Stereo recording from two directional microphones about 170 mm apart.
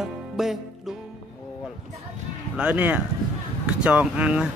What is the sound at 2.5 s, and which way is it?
Speech, 10° right (ahead or behind).